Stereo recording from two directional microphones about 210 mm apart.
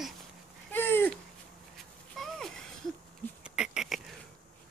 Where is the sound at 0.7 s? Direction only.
10° left (ahead or behind).